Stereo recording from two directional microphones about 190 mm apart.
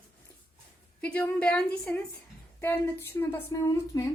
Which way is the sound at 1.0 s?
10° left (ahead or behind).